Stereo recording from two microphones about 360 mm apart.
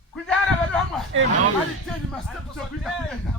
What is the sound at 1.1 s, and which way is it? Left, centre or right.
Speech, right.